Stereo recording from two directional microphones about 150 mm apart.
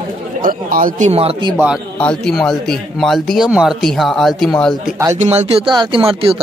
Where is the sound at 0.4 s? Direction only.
65° right (ahead or behind); by 1.5 s 40° right (ahead or behind).